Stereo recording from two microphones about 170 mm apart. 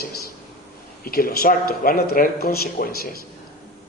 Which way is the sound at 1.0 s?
60° left (ahead or behind).